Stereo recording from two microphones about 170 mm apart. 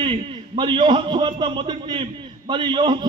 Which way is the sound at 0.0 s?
30° right (ahead or behind).